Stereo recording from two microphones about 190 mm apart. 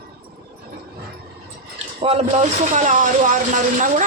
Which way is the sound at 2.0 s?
30° right (ahead or behind).